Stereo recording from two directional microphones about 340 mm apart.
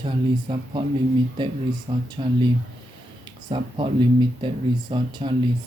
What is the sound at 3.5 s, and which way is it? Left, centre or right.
Speech, centre.